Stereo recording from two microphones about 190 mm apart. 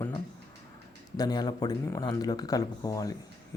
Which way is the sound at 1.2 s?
20° left (ahead or behind).